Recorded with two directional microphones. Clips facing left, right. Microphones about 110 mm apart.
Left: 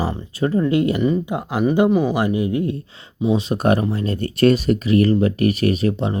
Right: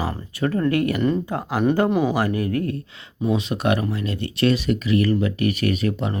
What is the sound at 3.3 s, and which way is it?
Speech, 35° left (ahead or behind).